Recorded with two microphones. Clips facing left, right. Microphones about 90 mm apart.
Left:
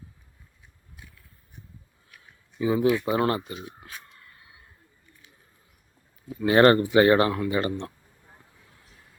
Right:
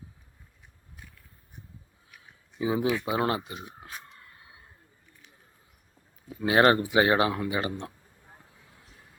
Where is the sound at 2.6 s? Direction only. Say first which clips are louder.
Left 4 dB; 15° right (ahead or behind).